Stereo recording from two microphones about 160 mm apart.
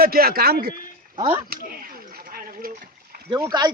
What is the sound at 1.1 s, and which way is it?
Speech, 35° right (ahead or behind).